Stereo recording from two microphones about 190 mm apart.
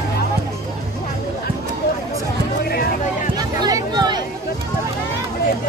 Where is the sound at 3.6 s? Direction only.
20° right (ahead or behind).